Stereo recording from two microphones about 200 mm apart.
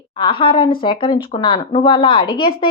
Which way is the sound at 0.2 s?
25° left (ahead or behind).